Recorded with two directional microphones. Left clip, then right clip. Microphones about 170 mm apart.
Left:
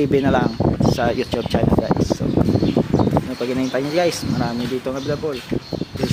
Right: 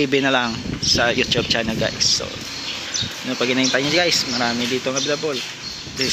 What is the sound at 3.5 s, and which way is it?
Speech, 10° left (ahead or behind).